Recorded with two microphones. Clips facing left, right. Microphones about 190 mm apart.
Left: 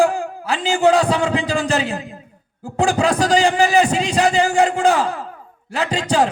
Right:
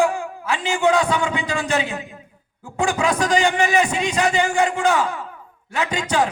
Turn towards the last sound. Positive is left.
turn(degrees=35)  # may be behind; listen again after turning